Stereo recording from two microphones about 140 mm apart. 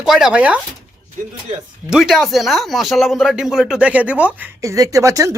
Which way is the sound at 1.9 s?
5° right (ahead or behind).